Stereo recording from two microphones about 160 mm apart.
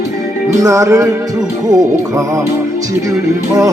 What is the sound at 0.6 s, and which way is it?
Music, 20° right (ahead or behind).